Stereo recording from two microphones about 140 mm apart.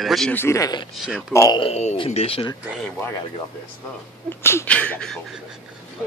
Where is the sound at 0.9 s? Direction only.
5° right (ahead or behind).